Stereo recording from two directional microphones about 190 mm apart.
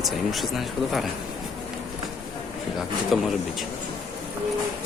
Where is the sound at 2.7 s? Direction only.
Centre (ahead or behind).